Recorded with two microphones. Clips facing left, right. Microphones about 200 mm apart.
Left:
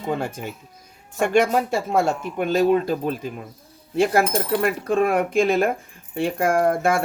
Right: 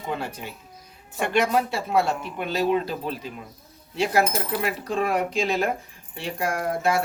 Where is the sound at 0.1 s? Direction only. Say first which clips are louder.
Left 5 dB; 45° left (ahead or behind).